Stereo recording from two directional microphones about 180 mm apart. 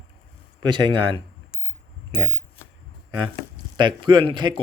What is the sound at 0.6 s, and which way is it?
Speech, 25° right (ahead or behind).